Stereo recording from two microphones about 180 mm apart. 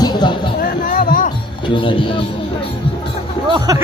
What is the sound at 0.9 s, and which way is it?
Music, 50° left (ahead or behind).